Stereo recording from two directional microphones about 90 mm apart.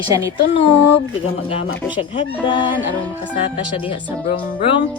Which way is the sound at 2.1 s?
70° left (ahead or behind).